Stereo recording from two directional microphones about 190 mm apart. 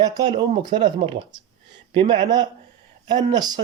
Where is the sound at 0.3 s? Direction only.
25° right (ahead or behind).